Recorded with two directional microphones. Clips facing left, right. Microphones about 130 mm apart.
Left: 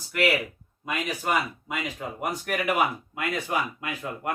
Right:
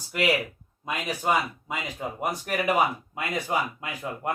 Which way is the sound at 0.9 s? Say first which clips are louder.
Right 1 dB; 20° right (ahead or behind).